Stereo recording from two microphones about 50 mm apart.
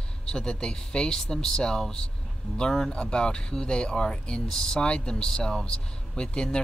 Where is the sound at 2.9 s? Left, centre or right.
Centre.